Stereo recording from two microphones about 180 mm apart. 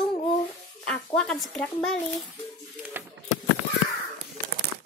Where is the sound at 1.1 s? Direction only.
5° left (ahead or behind).